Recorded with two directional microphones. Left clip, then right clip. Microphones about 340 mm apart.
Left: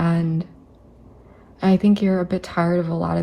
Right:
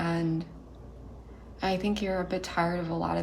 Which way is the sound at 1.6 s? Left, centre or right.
Centre.